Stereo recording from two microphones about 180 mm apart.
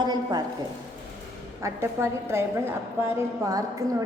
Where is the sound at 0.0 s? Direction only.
20° right (ahead or behind).